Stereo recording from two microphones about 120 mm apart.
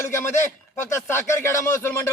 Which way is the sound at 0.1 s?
20° left (ahead or behind).